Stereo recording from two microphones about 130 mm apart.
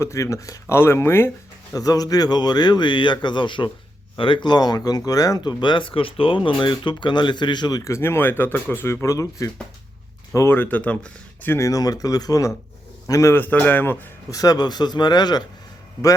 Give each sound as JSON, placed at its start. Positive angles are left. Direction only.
{"t": 0.0, "sound": "speech", "side_deg": 25}
{"t": 1.7, "sound": "a man's voice", "side_deg": 30}
{"t": 14.3, "sound": "speech", "side_deg": 30}